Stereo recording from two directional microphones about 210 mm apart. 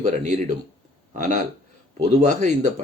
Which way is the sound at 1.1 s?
35° right (ahead or behind).